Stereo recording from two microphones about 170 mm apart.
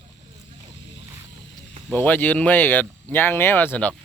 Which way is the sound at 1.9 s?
10° left (ahead or behind).